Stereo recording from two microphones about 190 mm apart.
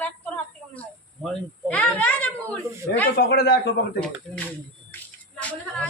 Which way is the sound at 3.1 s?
55° left (ahead or behind).